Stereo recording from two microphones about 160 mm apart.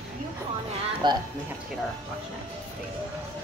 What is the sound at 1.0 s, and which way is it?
Speech, 30° right (ahead or behind).